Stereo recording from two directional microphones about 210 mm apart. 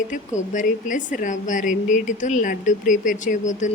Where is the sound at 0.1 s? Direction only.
35° left (ahead or behind).